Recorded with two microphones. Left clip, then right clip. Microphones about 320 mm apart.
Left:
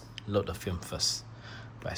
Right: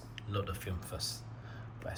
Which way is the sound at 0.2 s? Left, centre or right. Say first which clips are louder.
Left 8 dB; centre.